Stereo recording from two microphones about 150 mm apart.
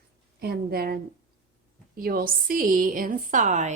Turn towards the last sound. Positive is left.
turn(degrees=-55)  # may be behind; listen again after turning